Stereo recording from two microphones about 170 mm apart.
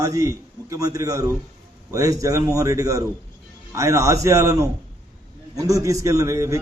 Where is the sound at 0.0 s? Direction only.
20° right (ahead or behind).